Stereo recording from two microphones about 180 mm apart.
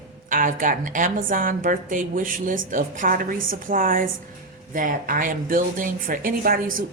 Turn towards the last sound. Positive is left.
turn(degrees=-50)  # may be behind; listen again after turning